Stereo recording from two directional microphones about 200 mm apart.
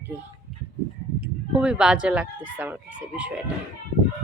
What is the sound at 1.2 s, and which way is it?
Speech, 5° right (ahead or behind).